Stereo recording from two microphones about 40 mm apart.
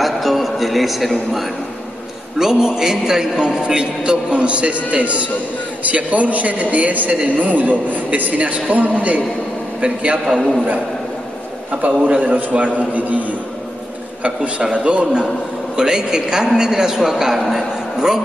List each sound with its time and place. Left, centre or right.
0.0 s a sound: centre
2.3 s a man's voice: centre; by 9.2 s right
9.8 s a man's voice: right
10.2 s a man's voice: centre
12.0 s a man's voice: right
14.6 s a man's voice: right
15.7 s a man's voice: centre